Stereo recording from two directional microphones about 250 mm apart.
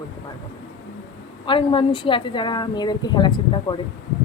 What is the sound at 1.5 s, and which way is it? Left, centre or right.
A woman's voice, centre.